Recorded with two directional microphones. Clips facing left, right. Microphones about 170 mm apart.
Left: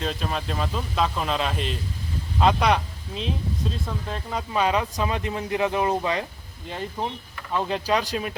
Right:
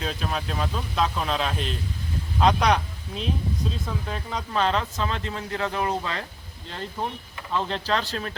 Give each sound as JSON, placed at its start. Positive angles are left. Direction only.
{"t": 0.0, "sound": "a man's voice", "side_deg": 0}
{"t": 7.5, "sound": "speech", "side_deg": 10}